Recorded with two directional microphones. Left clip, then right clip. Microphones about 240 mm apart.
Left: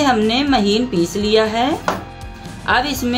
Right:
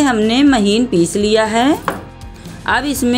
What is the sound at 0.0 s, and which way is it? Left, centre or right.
A woman's voice, right.